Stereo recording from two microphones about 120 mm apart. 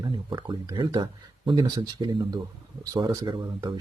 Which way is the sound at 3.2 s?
40° right (ahead or behind).